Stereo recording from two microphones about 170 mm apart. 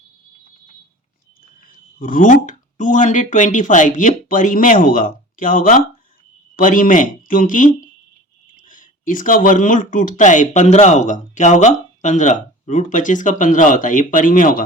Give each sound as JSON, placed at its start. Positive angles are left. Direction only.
{"t": 1.6, "sound": "speech", "side_deg": 55}